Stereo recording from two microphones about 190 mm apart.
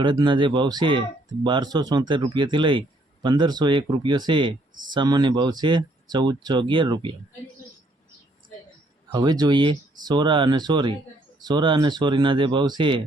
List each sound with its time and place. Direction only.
0.0 s speech: 25° right (ahead or behind)
9.1 s speech: 20° right (ahead or behind)